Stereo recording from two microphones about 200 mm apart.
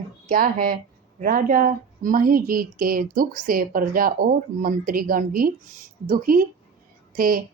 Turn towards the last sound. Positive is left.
turn(degrees=-45)  # may be behind; listen again after turning